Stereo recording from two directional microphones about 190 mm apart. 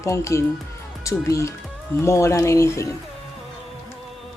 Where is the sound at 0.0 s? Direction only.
15° left (ahead or behind).